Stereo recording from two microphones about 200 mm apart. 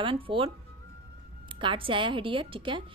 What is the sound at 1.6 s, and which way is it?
A woman's voice, 25° right (ahead or behind).